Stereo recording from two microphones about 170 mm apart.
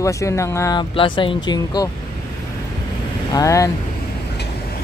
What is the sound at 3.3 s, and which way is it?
Speech, 20° left (ahead or behind).